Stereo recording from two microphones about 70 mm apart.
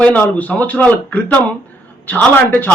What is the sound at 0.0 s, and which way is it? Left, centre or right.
Speech, left.